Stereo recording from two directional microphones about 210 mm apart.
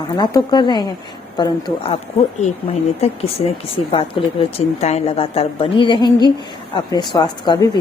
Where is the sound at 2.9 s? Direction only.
30° left (ahead or behind).